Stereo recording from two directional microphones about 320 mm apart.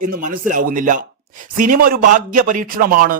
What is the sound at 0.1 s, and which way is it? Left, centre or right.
A man's voice, right.